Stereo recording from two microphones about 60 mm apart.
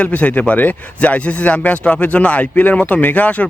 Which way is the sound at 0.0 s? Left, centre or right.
Left.